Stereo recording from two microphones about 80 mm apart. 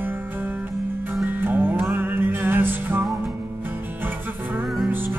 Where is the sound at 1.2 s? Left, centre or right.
Right.